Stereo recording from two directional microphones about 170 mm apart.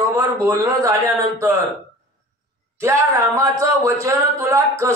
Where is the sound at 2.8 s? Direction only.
15° right (ahead or behind).